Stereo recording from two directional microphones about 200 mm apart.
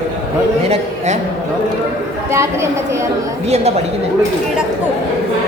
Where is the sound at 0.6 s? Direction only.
30° right (ahead or behind).